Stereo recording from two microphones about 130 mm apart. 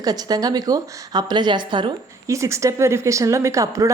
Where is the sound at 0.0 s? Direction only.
30° right (ahead or behind).